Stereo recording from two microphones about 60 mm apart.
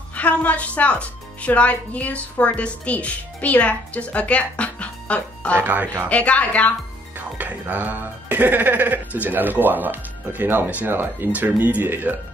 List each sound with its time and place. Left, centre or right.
0.1 s speech: left
5.6 s speech: right
6.0 s speech: left
7.2 s speech: right